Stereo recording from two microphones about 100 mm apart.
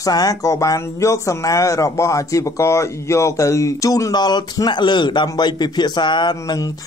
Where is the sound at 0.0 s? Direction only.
40° left (ahead or behind).